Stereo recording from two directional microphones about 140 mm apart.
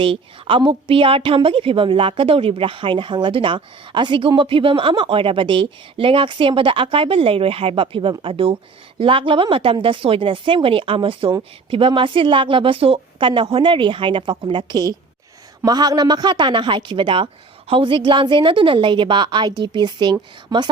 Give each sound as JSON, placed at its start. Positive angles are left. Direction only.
{"t": 0.0, "sound": "a woman's voice", "side_deg": -40}